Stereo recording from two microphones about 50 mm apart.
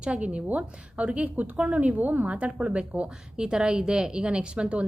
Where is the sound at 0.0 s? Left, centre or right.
Right.